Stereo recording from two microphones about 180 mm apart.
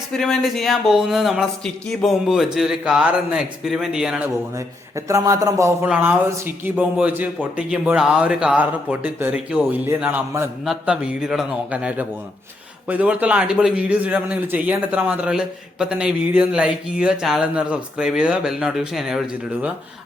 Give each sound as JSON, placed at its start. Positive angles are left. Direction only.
{"t": 0.2, "sound": "a man's voice", "side_deg": 0}
{"t": 4.5, "sound": "a man's voice", "side_deg": -15}